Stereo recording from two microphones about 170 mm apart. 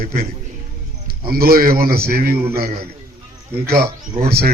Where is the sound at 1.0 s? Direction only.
60° right (ahead or behind).